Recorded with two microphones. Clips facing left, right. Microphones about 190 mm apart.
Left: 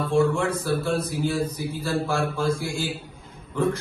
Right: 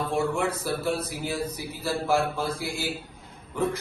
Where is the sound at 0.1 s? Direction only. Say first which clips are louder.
Left 7 dB; 15° right (ahead or behind).